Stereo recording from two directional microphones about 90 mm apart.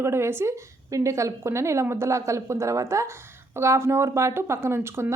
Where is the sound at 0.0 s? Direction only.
30° right (ahead or behind).